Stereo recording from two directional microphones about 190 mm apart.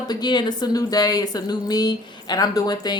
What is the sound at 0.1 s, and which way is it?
A woman's voice, 20° left (ahead or behind).